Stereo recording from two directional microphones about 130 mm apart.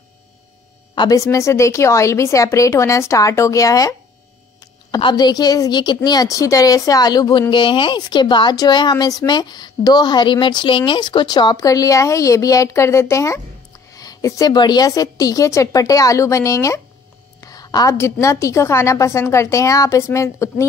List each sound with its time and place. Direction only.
0.9 s a woman's voice: 30° left (ahead or behind)
17.4 s a sound: 30° left (ahead or behind)
17.9 s a woman's voice: 20° left (ahead or behind)